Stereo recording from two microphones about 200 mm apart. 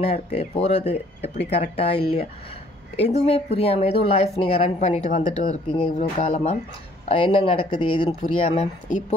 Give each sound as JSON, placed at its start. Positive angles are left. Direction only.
{"t": 0.0, "sound": "speech", "side_deg": 30}